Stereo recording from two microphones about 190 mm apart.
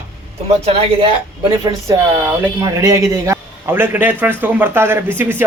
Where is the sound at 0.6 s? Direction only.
30° right (ahead or behind).